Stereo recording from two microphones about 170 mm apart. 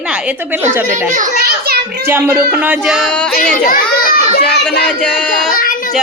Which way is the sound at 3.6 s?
55° left (ahead or behind).